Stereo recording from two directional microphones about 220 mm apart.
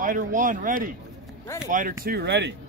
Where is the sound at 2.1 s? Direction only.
50° right (ahead or behind).